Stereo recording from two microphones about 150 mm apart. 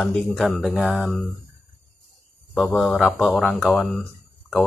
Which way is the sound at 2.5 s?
5° left (ahead or behind).